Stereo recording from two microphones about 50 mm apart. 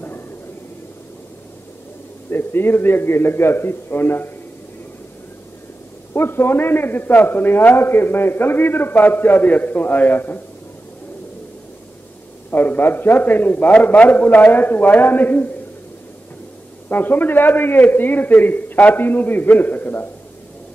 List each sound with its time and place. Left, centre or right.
2.3 s a man's voice: left
6.1 s a man's voice: left
12.4 s a man's voice: left
16.9 s a man's voice: left